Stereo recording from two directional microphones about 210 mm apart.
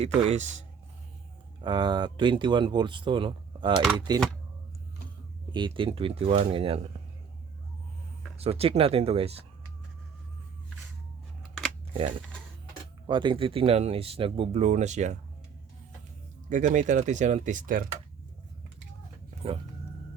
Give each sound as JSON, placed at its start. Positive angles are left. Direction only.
{"t": 0.2, "sound": "speech", "side_deg": -30}
{"t": 1.6, "sound": "speech", "side_deg": -20}
{"t": 5.5, "sound": "speech", "side_deg": -20}
{"t": 8.4, "sound": "speech", "side_deg": -30}
{"t": 13.1, "sound": "speech", "side_deg": -20}
{"t": 16.5, "sound": "speech", "side_deg": -35}